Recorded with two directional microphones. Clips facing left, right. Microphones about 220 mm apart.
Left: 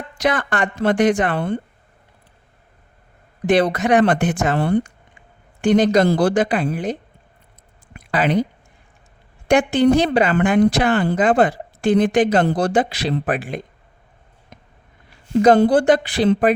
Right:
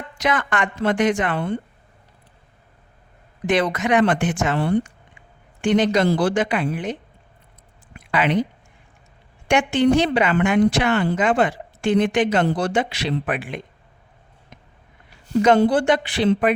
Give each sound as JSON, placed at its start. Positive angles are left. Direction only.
{"t": 0.3, "sound": "speech", "side_deg": 35}
{"t": 3.8, "sound": "speech", "side_deg": 40}
{"t": 8.1, "sound": "speech", "side_deg": 40}
{"t": 9.5, "sound": "speech", "side_deg": 35}
{"t": 15.4, "sound": "speech", "side_deg": 35}